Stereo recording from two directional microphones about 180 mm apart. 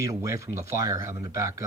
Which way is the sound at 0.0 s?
15° right (ahead or behind).